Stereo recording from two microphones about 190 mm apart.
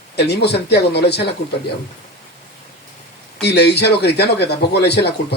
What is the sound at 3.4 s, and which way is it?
Speech, 60° left (ahead or behind).